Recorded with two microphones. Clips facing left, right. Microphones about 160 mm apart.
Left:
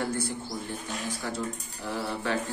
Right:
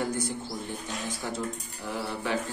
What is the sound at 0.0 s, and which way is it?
Bird, 15° right (ahead or behind).